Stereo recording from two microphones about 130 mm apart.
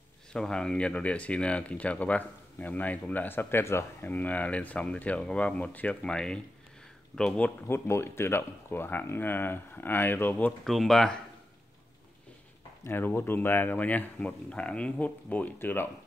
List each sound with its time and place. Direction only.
0.3 s speech: 5° left (ahead or behind)
10.6 s speech: centre (ahead or behind)
12.8 s speech: 15° left (ahead or behind)